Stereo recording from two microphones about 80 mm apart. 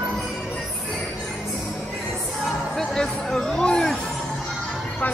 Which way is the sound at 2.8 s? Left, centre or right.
Centre.